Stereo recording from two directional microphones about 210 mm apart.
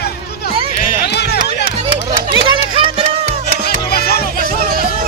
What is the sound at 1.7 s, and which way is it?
Music, 25° right (ahead or behind).